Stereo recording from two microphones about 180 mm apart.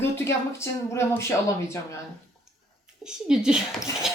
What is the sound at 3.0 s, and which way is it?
Speech, 5° right (ahead or behind).